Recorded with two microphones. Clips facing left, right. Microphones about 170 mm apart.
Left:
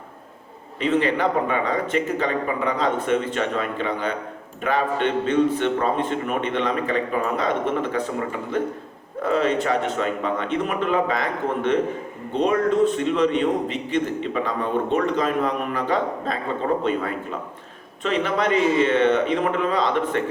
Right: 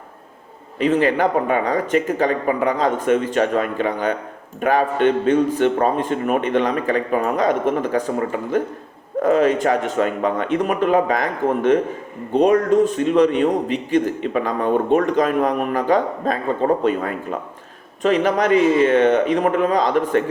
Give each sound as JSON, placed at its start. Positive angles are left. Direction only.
{"t": 0.8, "sound": "a man's voice", "side_deg": -45}